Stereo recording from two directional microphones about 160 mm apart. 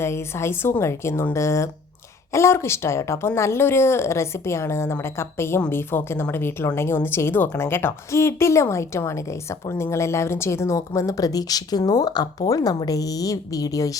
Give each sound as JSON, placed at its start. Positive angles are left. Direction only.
{"t": 0.0, "sound": "a woman's voice", "side_deg": 15}